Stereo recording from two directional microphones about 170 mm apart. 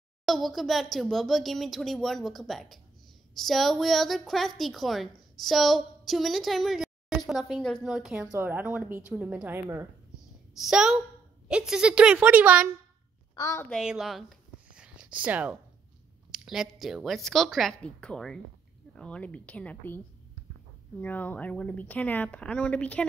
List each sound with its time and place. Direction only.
0.2 s a woman's voice: centre (ahead or behind)
10.5 s a woman's voice: centre (ahead or behind)
13.4 s speech: 15° left (ahead or behind)
13.7 s a woman's voice: centre (ahead or behind)
14.7 s a sound: 5° right (ahead or behind)
15.2 s a woman's voice: 10° right (ahead or behind); by 20.0 s 10° left (ahead or behind)
21.0 s speech: 10° left (ahead or behind)